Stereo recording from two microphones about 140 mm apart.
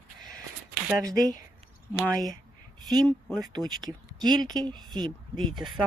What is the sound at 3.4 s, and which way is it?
Speech, 30° right (ahead or behind).